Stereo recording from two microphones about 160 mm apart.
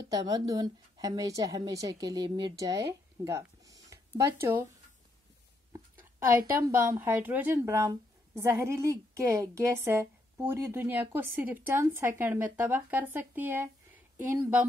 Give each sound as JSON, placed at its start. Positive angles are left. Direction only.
{"t": 0.1, "sound": "a woman's voice", "side_deg": -20}
{"t": 6.3, "sound": "a woman's voice", "side_deg": -65}
{"t": 6.7, "sound": "a woman's voice", "side_deg": -15}